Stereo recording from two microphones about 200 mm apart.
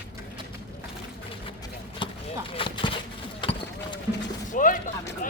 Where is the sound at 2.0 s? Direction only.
25° left (ahead or behind).